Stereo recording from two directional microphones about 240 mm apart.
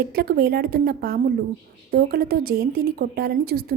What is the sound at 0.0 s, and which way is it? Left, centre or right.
A woman's voice, right.